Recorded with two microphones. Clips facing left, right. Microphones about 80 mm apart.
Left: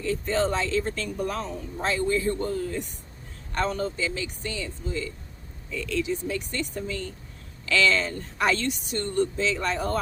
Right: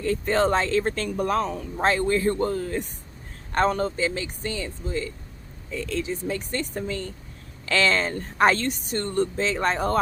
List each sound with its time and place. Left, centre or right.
0.0 s speech: right